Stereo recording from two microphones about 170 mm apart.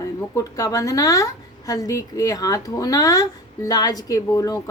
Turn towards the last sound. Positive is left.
turn(degrees=20)  # may be behind; listen again after turning